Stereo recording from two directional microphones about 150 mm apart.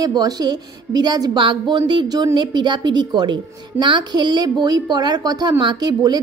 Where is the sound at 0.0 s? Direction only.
25° right (ahead or behind).